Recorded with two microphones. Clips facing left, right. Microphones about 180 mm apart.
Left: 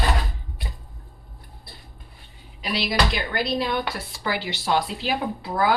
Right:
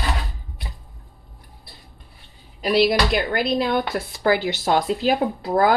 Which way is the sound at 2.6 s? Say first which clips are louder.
Right 7 dB; 50° right (ahead or behind).